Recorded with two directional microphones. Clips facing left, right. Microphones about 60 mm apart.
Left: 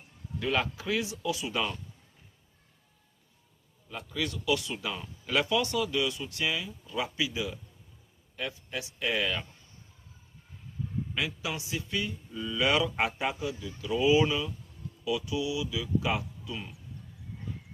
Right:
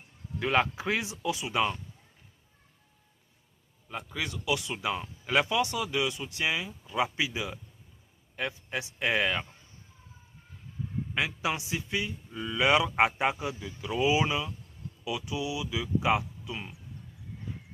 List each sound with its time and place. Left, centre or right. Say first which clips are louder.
0.3 s speech: right 3 dB; right
3.8 s speech: left 1 dB; right
11.3 s speech: right 4 dB; right